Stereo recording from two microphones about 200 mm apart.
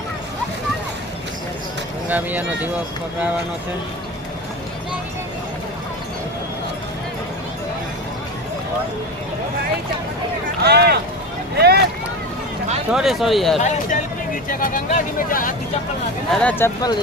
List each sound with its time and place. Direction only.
2.0 s speech: 10° right (ahead or behind)
10.6 s speech: 55° right (ahead or behind)
11.5 s boat: 55° right (ahead or behind)
12.9 s speech: centre (ahead or behind)
13.6 s speech: 35° left (ahead or behind)
16.3 s speech: 5° left (ahead or behind)